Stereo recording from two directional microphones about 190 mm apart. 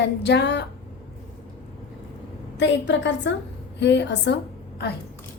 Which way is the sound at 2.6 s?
70° left (ahead or behind).